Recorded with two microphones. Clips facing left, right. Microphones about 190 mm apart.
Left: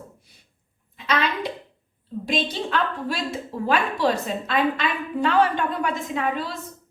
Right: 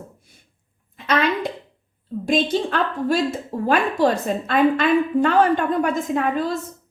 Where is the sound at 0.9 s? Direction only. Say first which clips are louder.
Right 4 dB; 50° right (ahead or behind).